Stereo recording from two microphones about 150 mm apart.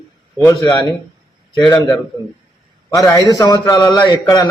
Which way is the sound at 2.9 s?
25° left (ahead or behind).